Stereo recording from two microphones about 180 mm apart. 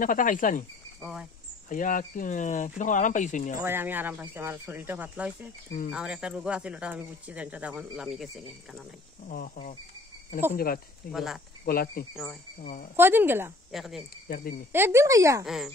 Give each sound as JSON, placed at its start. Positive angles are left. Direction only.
{"t": 0.0, "sound": "speech", "side_deg": 45}
{"t": 1.7, "sound": "speech", "side_deg": 45}
{"t": 3.5, "sound": "speech", "side_deg": -10}
{"t": 10.5, "sound": "speech", "side_deg": 55}
{"t": 11.1, "sound": "speech", "side_deg": 0}
{"t": 11.6, "sound": "speech", "side_deg": 55}
{"t": 12.9, "sound": "speech", "side_deg": -10}
{"t": 13.7, "sound": "speech", "side_deg": 0}
{"t": 14.2, "sound": "speech", "side_deg": 55}
{"t": 14.7, "sound": "speech", "side_deg": -15}
{"t": 15.4, "sound": "speech", "side_deg": 0}